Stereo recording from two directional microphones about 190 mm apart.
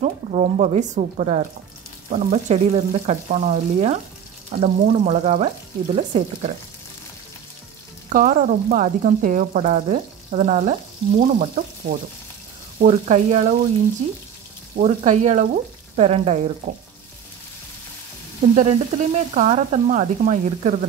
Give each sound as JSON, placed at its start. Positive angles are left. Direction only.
{"t": 0.0, "sound": "frying", "side_deg": -40}
{"t": 8.1, "sound": "frying", "side_deg": -45}
{"t": 14.8, "sound": "frying", "side_deg": -40}
{"t": 18.5, "sound": "frying", "side_deg": -35}